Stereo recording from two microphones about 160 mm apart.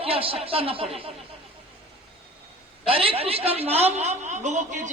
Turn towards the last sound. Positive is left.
turn(degrees=-50)  # may be behind; listen again after turning